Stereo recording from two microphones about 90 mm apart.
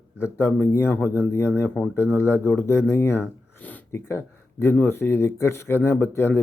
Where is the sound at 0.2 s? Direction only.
25° left (ahead or behind).